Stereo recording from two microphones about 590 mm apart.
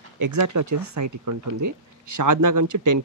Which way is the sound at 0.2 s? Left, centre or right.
Right.